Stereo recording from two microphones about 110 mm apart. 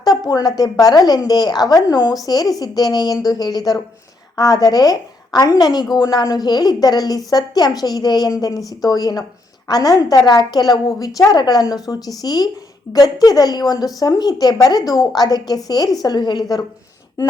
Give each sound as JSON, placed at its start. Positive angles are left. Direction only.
{"t": 0.0, "sound": "a woman's voice", "side_deg": 35}